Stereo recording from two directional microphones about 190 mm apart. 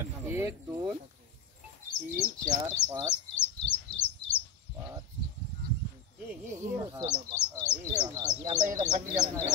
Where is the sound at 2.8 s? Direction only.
10° left (ahead or behind).